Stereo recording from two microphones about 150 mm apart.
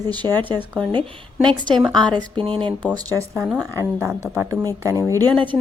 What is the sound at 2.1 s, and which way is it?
Speech, 35° right (ahead or behind).